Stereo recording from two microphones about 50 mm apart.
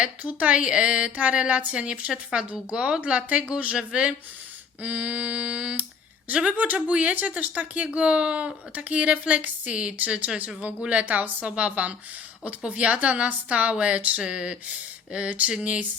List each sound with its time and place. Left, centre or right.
0.0 s a woman's voice: right